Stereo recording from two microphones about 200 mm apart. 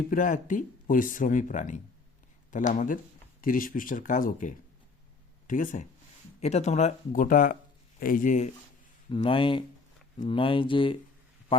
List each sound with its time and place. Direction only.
0.1 s speech: 40° left (ahead or behind)
9.0 s speech: 25° left (ahead or behind)